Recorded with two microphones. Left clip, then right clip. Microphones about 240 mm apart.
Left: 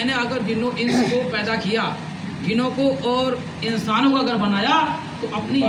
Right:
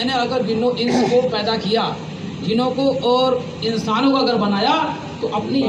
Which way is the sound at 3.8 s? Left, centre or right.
Left.